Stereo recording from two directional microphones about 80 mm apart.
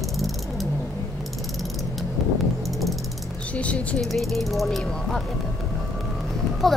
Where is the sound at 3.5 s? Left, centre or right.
Centre.